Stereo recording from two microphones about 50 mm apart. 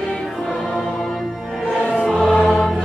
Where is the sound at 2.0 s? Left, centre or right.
Centre.